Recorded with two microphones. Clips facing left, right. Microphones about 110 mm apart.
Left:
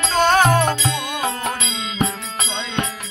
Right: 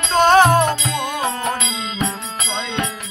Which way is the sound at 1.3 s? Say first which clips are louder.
Right 2 dB; 25° right (ahead or behind).